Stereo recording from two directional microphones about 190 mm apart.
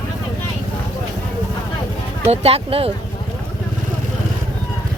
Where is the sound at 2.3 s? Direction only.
30° right (ahead or behind).